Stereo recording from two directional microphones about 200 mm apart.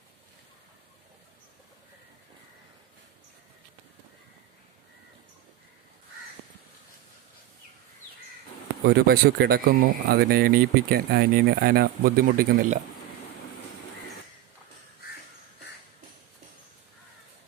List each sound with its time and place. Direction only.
8.9 s speech: 50° right (ahead or behind)